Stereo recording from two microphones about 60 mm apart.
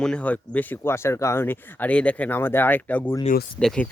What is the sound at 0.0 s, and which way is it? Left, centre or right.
Speech, centre.